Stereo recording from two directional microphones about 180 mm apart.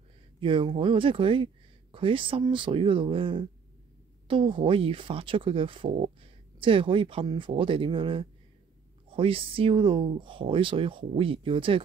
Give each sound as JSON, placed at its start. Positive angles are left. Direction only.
{"t": 0.4, "sound": "speech", "side_deg": -30}